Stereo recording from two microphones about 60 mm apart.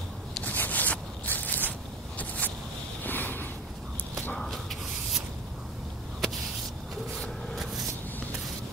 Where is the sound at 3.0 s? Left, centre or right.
Left.